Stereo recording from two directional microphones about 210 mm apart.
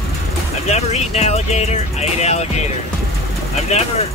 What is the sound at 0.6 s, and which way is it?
Speech, 30° left (ahead or behind).